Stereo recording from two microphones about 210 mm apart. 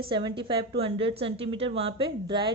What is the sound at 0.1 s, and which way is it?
A woman's voice, 25° right (ahead or behind).